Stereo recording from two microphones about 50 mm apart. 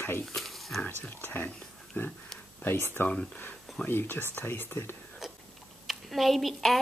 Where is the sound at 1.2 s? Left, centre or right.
Left.